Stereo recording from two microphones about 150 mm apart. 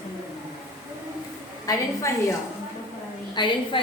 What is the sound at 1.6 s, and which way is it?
Speech, 20° left (ahead or behind).